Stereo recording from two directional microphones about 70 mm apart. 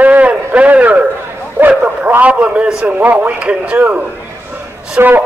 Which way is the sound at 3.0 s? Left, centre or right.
Right.